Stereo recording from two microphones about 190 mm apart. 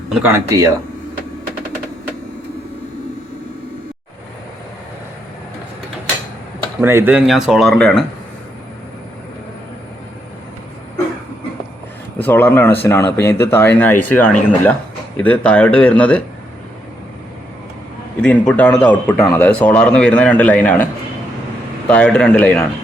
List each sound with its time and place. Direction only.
0.1 s speech: 10° right (ahead or behind)
6.8 s speech: 10° right (ahead or behind)
12.2 s a man's voice: 10° left (ahead or behind)
18.2 s a man's voice: 5° left (ahead or behind)
21.8 s a man's voice: 5° left (ahead or behind)